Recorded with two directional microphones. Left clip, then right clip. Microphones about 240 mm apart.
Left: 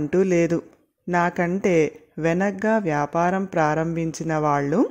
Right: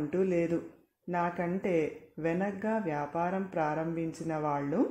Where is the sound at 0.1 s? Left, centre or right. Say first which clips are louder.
Left 10 dB; left.